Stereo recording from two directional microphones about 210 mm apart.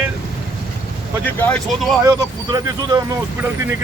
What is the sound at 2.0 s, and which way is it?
Speech, 15° right (ahead or behind).